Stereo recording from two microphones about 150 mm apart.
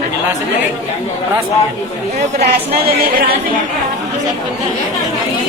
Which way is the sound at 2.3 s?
90° right.